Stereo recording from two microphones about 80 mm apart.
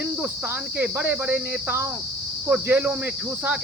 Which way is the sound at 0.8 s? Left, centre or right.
Right.